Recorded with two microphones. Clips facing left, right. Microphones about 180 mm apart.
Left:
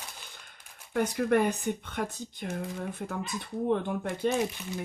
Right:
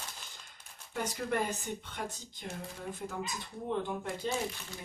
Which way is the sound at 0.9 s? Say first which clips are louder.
Left 8 dB; 60° left (ahead or behind).